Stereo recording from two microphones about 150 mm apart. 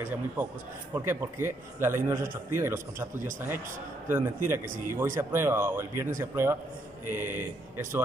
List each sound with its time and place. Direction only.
0.9 s a man's voice: 15° right (ahead or behind)
4.1 s a man's voice: 15° right (ahead or behind)